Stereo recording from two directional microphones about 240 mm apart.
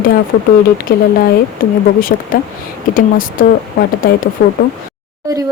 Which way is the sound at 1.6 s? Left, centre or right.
Left.